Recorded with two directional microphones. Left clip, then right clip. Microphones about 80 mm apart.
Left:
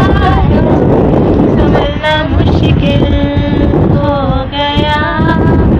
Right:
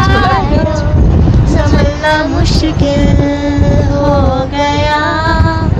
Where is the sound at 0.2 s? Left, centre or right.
Right.